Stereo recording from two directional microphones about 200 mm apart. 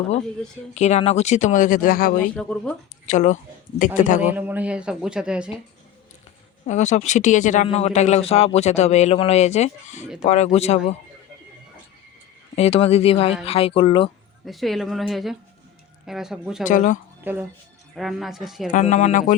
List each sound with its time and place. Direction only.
0.7 s speech: 35° left (ahead or behind)
2.3 s a man's voice: 5° left (ahead or behind)
3.1 s speech: 35° left (ahead or behind)
4.2 s a man's voice: 10° right (ahead or behind)
6.7 s speech: 35° left (ahead or behind)
12.5 s speech: 30° left (ahead or behind)
14.4 s a man's voice: centre (ahead or behind)
16.6 s speech: 40° left (ahead or behind)
17.9 s a man's voice: centre (ahead or behind)
18.7 s speech: 35° left (ahead or behind)